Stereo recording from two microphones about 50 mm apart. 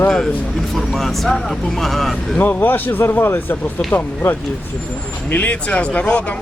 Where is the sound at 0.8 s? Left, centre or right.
Centre.